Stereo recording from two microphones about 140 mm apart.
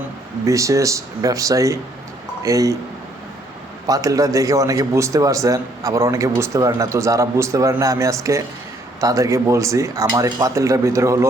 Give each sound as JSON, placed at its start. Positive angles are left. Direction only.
{"t": 0.4, "sound": "a man's voice", "side_deg": -20}
{"t": 3.8, "sound": "a man's voice", "side_deg": -25}